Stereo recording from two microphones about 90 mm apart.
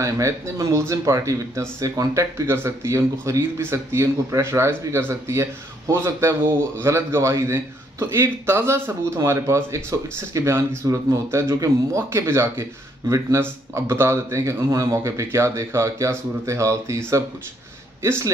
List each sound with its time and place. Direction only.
0.0 s speech: 35° right (ahead or behind)
18.0 s a man's voice: 30° right (ahead or behind)